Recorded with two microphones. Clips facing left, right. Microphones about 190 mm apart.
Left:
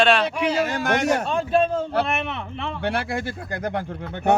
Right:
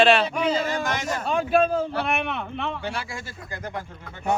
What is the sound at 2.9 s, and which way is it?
Speech, 60° left (ahead or behind).